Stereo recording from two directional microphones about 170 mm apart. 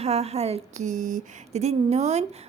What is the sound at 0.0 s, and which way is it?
Speech, 40° right (ahead or behind).